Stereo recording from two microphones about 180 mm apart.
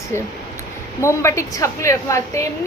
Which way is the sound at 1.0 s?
15° left (ahead or behind).